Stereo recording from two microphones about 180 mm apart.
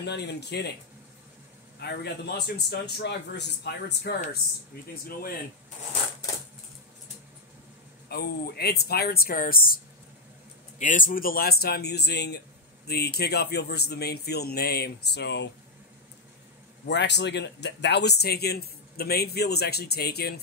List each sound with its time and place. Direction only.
0.0 s a man's voice: 70° left (ahead or behind)
1.8 s a man's voice: 65° left (ahead or behind)
8.1 s speech: 60° left (ahead or behind)
10.8 s speech: 45° left (ahead or behind); by 15.5 s 75° left (ahead or behind)
16.8 s speech: 75° left (ahead or behind)